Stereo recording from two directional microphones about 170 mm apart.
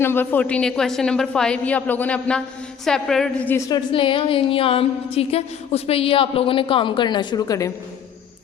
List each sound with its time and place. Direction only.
0.0 s a woman's voice: 10° left (ahead or behind)
3.5 s a woman's voice: 20° left (ahead or behind)